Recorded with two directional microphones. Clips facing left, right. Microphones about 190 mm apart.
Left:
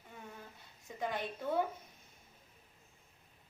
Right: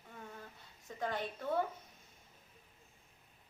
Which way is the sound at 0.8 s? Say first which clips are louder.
Even; 10° left (ahead or behind).